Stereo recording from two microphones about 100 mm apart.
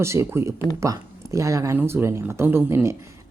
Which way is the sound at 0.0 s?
30° right (ahead or behind).